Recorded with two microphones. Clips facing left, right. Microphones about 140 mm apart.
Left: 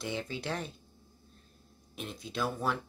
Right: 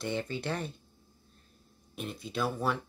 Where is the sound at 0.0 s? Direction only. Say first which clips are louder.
Right 3 dB; centre (ahead or behind).